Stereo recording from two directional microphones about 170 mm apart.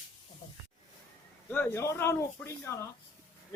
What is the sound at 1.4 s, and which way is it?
Speech, 10° left (ahead or behind).